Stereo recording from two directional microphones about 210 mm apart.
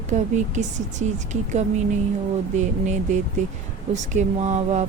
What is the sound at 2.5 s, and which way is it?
A woman's voice, 35° right (ahead or behind).